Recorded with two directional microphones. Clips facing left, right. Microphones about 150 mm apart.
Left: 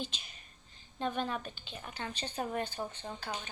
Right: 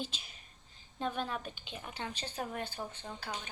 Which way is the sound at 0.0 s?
5° right (ahead or behind).